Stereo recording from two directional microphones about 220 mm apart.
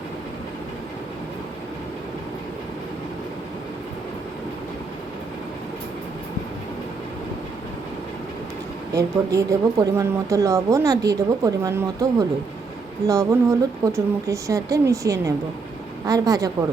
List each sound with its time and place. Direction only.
8.9 s speech: 15° right (ahead or behind)
13.1 s speech: 15° right (ahead or behind)